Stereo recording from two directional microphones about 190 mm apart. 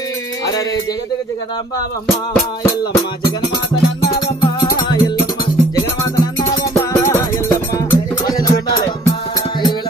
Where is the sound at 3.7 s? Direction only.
20° left (ahead or behind).